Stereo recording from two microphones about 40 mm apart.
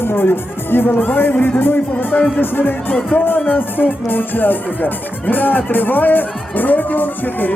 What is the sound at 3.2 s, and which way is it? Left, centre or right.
Speech, left.